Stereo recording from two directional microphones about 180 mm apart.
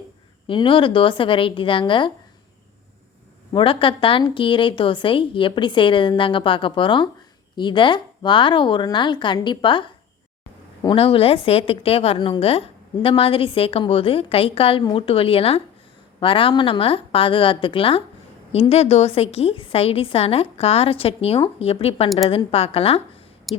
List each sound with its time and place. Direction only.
0.4 s a woman's voice: 30° left (ahead or behind)
3.5 s a woman's voice: 30° left (ahead or behind)
23.5 s a sound: centre (ahead or behind)